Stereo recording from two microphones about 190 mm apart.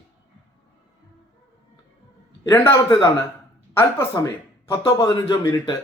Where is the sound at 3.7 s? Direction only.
10° left (ahead or behind).